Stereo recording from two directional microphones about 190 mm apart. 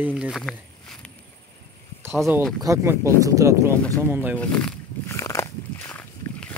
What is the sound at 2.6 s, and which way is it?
Speech, 15° right (ahead or behind).